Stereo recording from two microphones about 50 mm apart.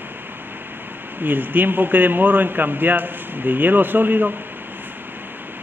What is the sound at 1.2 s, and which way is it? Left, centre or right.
A man's voice, right.